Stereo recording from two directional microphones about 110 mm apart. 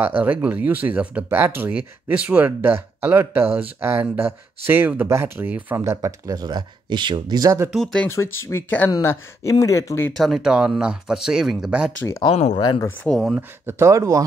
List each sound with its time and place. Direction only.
0.0 s speech: 15° right (ahead or behind)
5.9 s speech: 35° right (ahead or behind)
7.7 s speech: centre (ahead or behind)
8.1 s speech: 25° left (ahead or behind)
10.1 s speech: centre (ahead or behind)
12.5 s speech: 45° left (ahead or behind)
13.0 s speech: 5° left (ahead or behind)
13.4 s speech: 20° right (ahead or behind)